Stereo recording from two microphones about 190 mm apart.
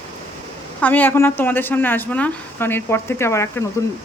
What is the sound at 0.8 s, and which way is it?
Speech, 10° left (ahead or behind).